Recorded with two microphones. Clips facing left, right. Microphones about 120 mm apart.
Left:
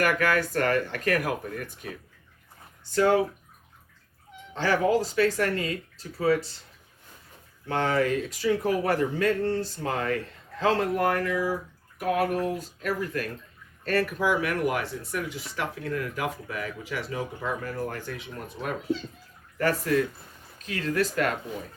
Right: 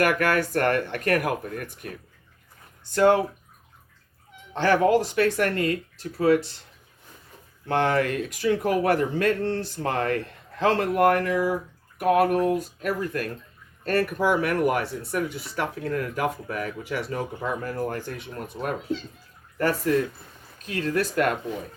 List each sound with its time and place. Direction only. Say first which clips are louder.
0.0 s speech: right 2 dB; 60° right (ahead or behind)
2.9 s speech: right 3 dB; 60° right (ahead or behind)
4.5 s speech: right 4 dB; 60° right (ahead or behind)
7.7 s speech: right 2 dB; 65° right (ahead or behind)
9.8 s speech: right 6 dB; 55° right (ahead or behind)
20.7 s speech: right 1 dB; 45° right (ahead or behind)